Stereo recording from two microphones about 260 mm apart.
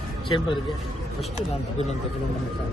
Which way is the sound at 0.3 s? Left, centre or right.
Centre.